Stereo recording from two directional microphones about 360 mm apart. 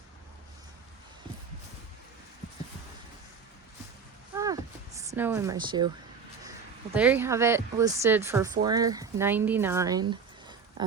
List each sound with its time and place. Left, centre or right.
4.9 s speech: centre
6.9 s speech: centre